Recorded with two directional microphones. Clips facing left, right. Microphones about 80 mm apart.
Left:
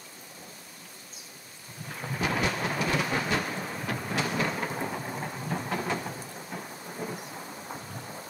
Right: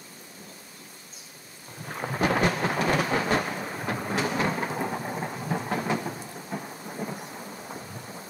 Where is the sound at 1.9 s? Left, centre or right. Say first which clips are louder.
Right 5 dB; right.